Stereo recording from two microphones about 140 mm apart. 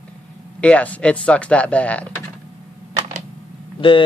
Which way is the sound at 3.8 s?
40° left (ahead or behind).